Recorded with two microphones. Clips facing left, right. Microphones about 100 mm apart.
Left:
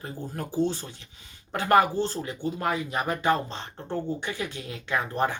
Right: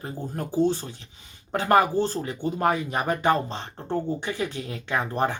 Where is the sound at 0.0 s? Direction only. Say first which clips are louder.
Right 3 dB; 15° right (ahead or behind).